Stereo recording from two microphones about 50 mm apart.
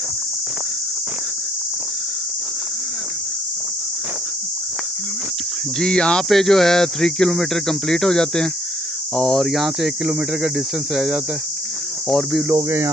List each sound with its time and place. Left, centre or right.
5.8 s speech: centre
6.2 s speech: centre
9.4 s speech: centre
10.0 s speech: right
12.0 s speech: centre